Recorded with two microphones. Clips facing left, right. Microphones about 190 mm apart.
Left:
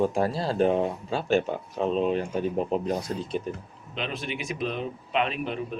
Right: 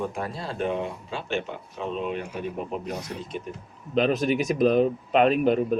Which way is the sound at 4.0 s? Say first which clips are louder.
Right 11 dB; 45° right (ahead or behind).